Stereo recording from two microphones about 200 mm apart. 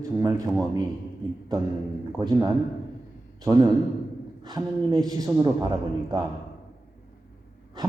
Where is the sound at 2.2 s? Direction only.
20° right (ahead or behind).